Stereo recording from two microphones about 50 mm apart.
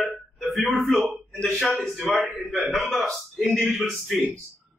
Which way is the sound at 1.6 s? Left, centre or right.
Centre.